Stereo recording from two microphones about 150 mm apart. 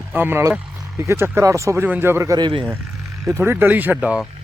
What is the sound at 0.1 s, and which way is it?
Speech, 15° right (ahead or behind).